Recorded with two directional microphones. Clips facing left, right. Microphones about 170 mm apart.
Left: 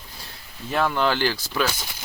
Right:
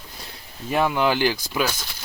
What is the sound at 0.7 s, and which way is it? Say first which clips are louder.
Speech: right 2 dB; 10° right (ahead or behind).